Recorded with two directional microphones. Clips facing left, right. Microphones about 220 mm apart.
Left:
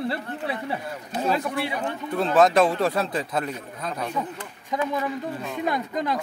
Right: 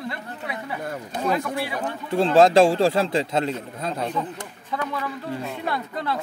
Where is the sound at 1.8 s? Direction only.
30° right (ahead or behind).